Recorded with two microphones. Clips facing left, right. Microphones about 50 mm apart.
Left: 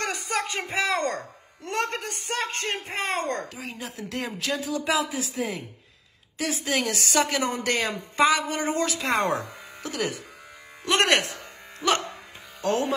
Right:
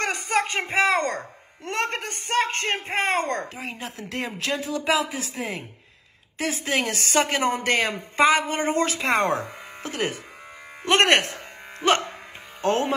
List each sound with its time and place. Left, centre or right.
0.0 s speech: right